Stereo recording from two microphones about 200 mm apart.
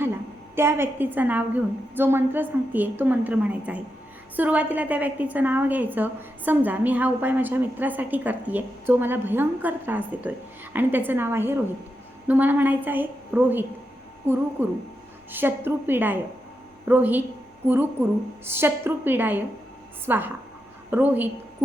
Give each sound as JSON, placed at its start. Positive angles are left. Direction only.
{"t": 0.0, "sound": "a woman's voice", "side_deg": -10}
{"t": 18.4, "sound": "a woman's voice", "side_deg": -10}